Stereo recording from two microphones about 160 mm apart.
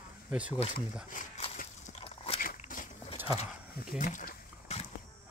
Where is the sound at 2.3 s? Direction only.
60° left (ahead or behind).